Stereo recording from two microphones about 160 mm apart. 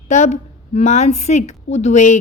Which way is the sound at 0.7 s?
45° left (ahead or behind).